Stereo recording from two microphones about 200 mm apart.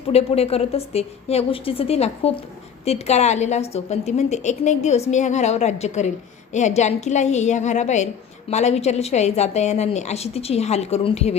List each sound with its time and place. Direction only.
0.1 s a woman's voice: 30° left (ahead or behind)